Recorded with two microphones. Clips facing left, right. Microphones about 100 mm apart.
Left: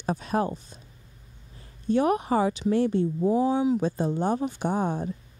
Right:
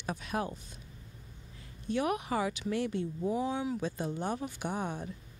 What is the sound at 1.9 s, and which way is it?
A woman's voice, 35° left (ahead or behind).